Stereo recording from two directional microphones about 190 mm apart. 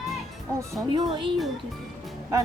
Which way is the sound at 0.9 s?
25° right (ahead or behind).